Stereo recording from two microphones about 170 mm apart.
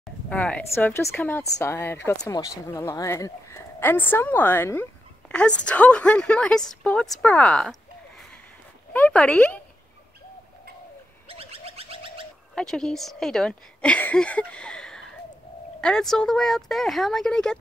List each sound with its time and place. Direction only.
0.3 s speech: 5° left (ahead or behind)
8.9 s speech: 10° left (ahead or behind)
11.2 s bird: 35° right (ahead or behind)
12.5 s speech: 5° left (ahead or behind)